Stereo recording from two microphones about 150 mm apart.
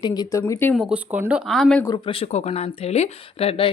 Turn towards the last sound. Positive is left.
turn(degrees=40)  # may be behind; listen again after turning